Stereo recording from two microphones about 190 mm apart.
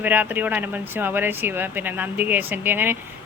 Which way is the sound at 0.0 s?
10° right (ahead or behind).